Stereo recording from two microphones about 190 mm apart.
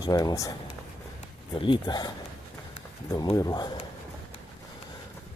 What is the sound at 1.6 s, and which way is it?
Speech, 25° left (ahead or behind).